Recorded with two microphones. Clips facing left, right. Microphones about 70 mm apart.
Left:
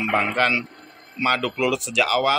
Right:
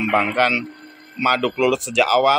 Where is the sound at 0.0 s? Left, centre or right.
Centre.